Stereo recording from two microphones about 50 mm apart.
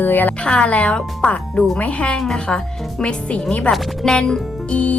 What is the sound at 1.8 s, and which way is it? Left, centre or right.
Speech, left.